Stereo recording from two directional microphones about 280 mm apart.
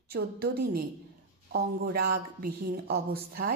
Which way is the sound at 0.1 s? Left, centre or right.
Right.